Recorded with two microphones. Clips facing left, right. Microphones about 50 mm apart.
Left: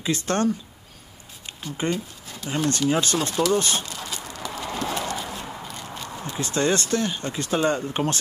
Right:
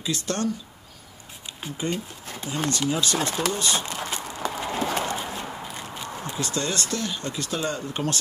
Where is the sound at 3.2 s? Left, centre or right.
Right.